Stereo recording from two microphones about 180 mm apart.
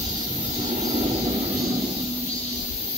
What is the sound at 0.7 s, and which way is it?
Vehicle, 35° right (ahead or behind).